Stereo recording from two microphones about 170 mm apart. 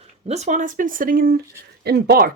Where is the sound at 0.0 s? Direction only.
40° right (ahead or behind); by 1.4 s 60° right (ahead or behind).